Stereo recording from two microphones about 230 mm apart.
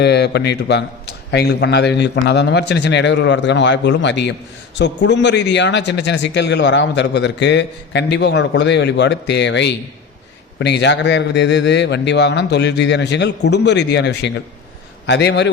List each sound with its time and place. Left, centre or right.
0.0 s a man's voice: left